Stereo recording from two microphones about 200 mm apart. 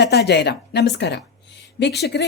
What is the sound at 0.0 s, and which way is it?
A woman's voice, 55° left (ahead or behind).